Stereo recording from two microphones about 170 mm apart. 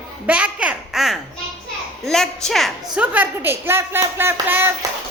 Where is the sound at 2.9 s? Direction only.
10° right (ahead or behind).